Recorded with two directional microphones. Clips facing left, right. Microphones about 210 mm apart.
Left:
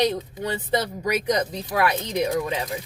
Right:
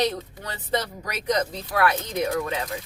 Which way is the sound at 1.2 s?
15° left (ahead or behind).